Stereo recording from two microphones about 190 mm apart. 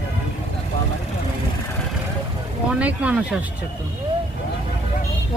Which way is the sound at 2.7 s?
5° right (ahead or behind).